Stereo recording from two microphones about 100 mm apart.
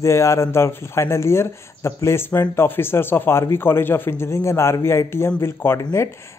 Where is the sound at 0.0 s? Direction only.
30° left (ahead or behind).